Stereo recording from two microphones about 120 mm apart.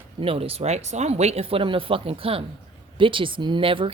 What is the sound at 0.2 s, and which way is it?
A woman's voice, 50° right (ahead or behind).